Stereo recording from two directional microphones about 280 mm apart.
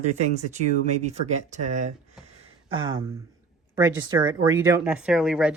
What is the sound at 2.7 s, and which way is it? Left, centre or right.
Speech, centre.